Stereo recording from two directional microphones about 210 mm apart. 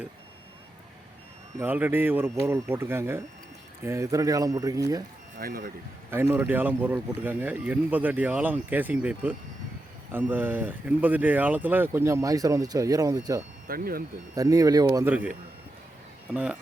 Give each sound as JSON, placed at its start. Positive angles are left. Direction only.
{"t": 1.5, "sound": "speech", "side_deg": -10}
{"t": 5.4, "sound": "speech", "side_deg": -45}
{"t": 6.1, "sound": "speech", "side_deg": -10}
{"t": 13.7, "sound": "speech", "side_deg": -45}
{"t": 14.3, "sound": "speech", "side_deg": -15}